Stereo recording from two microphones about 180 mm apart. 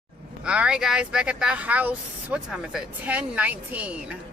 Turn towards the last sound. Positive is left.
turn(degrees=-5)  # may be behind; listen again after turning